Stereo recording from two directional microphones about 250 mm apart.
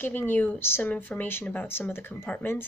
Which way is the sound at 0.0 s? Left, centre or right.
Centre.